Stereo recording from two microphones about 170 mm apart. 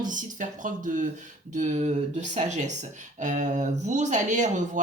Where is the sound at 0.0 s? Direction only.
50° right (ahead or behind).